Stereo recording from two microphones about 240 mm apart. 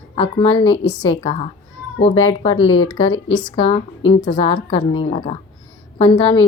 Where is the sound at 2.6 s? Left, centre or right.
Left.